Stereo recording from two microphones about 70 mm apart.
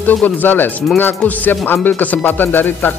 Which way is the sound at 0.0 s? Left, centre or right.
Left.